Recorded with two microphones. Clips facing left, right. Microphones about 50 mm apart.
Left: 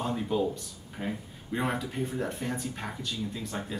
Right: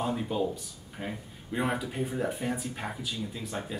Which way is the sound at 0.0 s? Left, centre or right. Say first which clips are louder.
Left 1 dB; centre.